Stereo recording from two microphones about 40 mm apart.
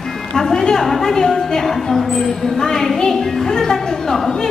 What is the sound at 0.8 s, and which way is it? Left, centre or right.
A woman's voice, centre.